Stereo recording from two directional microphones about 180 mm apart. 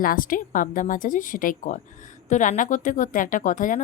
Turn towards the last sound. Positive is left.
turn(degrees=45)  # may be behind; listen again after turning